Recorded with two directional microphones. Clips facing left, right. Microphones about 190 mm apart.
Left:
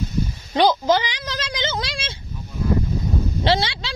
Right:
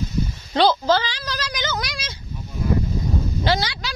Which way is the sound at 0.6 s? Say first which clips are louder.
Even; 15° left (ahead or behind).